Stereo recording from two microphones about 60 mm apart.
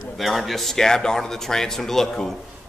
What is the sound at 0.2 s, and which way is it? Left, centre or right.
Speech, centre.